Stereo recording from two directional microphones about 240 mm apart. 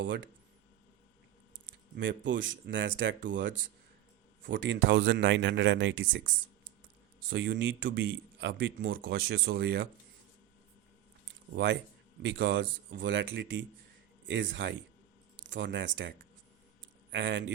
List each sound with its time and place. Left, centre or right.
2.0 s speech: right
7.3 s speech: right
11.5 s speech: right